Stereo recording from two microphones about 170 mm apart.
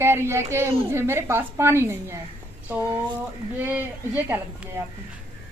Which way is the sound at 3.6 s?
10° right (ahead or behind).